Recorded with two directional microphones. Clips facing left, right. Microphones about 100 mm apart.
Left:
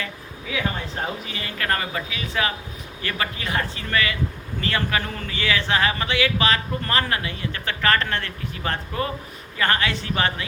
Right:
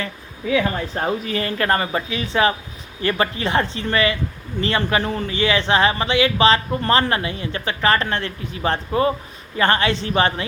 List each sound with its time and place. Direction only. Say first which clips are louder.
1.2 s a man's voice: right 8 dB; 45° right (ahead or behind); by 10.4 s 30° right (ahead or behind)